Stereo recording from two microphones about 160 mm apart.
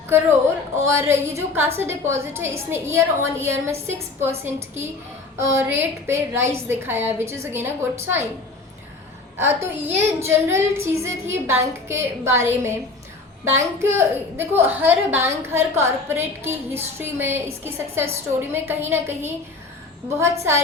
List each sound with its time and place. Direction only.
0.8 s a woman's voice: 15° right (ahead or behind)
9.4 s a woman's voice: 15° right (ahead or behind)